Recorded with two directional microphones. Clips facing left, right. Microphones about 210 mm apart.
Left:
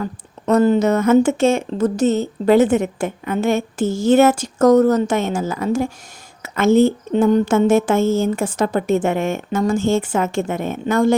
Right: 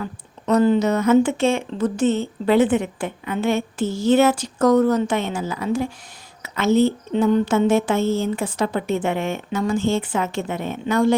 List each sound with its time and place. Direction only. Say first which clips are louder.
0.0 s speech: left 4 dB; 45° left (ahead or behind)